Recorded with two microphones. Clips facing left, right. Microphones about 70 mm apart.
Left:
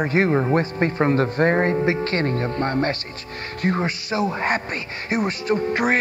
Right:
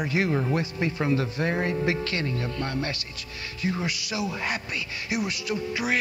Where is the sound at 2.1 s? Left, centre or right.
Left.